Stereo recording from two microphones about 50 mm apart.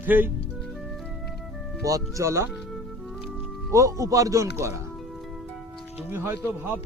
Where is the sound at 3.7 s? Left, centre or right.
Right.